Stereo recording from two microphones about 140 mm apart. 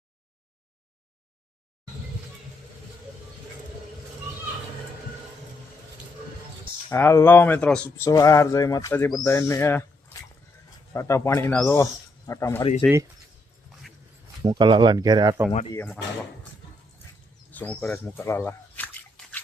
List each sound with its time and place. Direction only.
6.9 s speech: 20° left (ahead or behind)
10.9 s speech: 20° left (ahead or behind)
12.8 s speech: 10° left (ahead or behind)
14.4 s speech: 35° right (ahead or behind)
17.5 s a sound: 10° left (ahead or behind)